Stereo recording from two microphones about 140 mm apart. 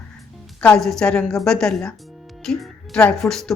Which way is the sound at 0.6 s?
5° left (ahead or behind).